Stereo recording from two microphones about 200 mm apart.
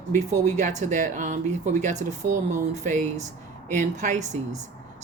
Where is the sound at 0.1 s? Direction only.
35° right (ahead or behind).